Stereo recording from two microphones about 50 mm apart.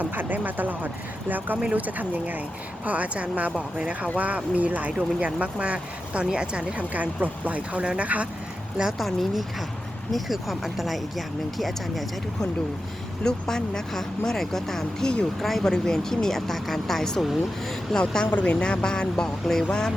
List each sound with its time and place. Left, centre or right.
0.0 s speech: right
8.8 s speech: centre
13.2 s speech: centre
18.3 s speech: left